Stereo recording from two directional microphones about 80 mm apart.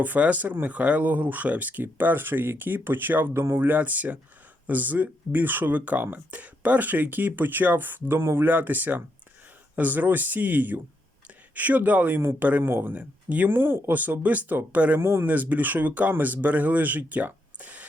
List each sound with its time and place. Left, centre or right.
0.0 s speech: centre